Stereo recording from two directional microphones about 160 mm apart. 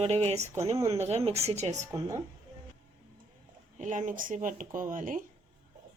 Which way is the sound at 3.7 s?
50° right (ahead or behind).